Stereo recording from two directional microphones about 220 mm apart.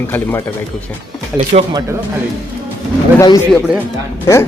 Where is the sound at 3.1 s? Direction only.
15° left (ahead or behind).